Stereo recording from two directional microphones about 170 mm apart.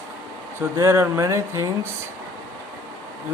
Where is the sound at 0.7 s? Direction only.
15° right (ahead or behind).